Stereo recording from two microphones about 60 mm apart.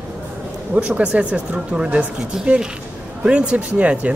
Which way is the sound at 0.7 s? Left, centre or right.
Centre.